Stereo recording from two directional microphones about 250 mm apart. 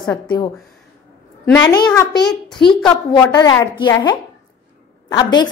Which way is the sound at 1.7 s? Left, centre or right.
Centre.